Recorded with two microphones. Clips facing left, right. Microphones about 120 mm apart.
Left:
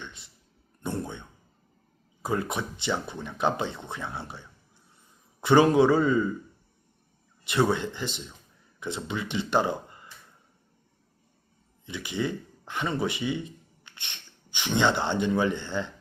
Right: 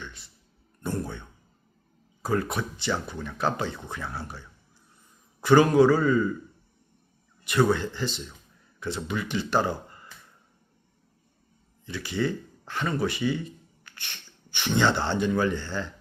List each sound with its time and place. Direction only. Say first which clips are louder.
0.0 s a sound: right 1 dB; 20° left (ahead or behind)
0.8 s speech: right 1 dB; 20° left (ahead or behind)
2.2 s speech: right 2 dB; 20° left (ahead or behind)
7.4 s speech: right 2 dB; 25° left (ahead or behind)
11.9 s speech: right 2 dB; 20° left (ahead or behind)